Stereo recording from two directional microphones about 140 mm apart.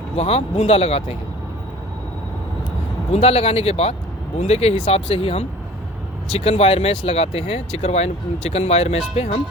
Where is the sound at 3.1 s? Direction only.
45° left (ahead or behind).